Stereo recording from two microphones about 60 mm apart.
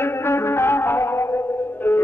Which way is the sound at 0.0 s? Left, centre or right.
Left.